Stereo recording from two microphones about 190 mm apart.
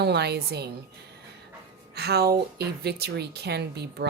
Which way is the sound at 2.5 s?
60° right (ahead or behind).